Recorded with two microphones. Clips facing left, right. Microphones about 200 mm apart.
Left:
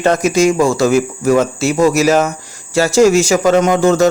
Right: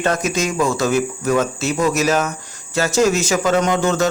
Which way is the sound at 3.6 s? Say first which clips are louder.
Left 6 dB; 45° left (ahead or behind).